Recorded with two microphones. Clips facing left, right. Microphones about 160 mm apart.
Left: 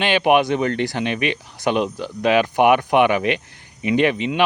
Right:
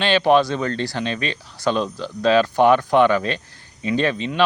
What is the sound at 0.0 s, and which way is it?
Speech, 15° left (ahead or behind).